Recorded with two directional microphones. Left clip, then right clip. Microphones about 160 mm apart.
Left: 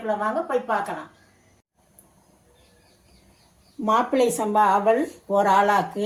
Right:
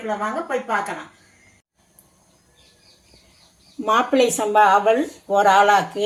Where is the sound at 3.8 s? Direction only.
35° right (ahead or behind).